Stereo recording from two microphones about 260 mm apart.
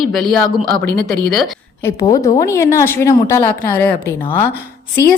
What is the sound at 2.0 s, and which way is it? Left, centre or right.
A woman's voice, centre.